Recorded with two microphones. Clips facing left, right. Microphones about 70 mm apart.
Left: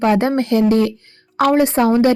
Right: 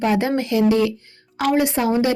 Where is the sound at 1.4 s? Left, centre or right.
Left.